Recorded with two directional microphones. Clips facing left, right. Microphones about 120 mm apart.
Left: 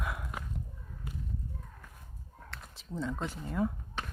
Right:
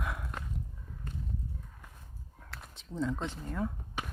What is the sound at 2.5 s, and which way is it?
Speech, centre (ahead or behind).